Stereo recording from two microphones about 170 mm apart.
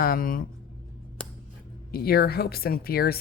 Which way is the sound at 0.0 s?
60° left (ahead or behind).